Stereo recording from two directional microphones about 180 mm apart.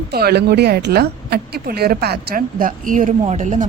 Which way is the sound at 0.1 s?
60° right (ahead or behind).